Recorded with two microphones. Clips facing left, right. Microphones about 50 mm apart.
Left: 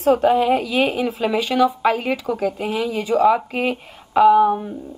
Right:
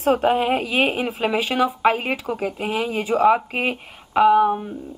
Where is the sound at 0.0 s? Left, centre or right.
Right.